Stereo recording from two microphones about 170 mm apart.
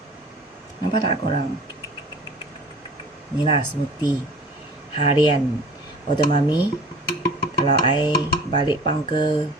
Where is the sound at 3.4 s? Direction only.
30° left (ahead or behind).